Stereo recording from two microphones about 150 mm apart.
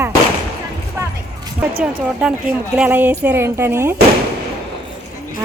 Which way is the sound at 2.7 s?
10° right (ahead or behind).